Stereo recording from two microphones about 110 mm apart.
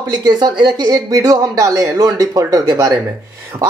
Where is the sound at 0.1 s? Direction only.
40° right (ahead or behind).